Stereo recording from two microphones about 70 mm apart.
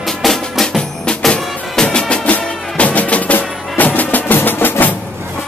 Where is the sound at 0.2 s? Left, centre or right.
Centre.